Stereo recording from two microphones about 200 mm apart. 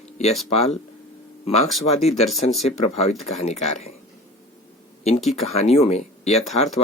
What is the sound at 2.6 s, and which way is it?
Speech, 30° left (ahead or behind).